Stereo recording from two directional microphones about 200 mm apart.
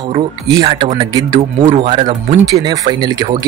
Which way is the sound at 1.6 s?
35° right (ahead or behind).